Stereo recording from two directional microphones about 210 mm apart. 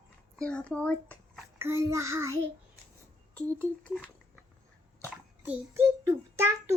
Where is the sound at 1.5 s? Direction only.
10° right (ahead or behind).